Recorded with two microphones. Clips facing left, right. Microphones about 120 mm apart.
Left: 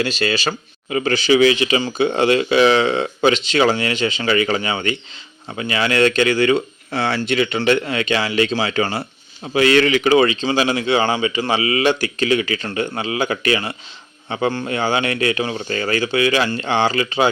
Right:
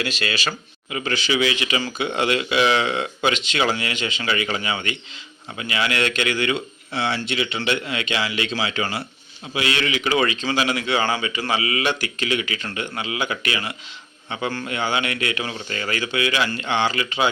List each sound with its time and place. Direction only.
0.0 s speech: 35° left (ahead or behind)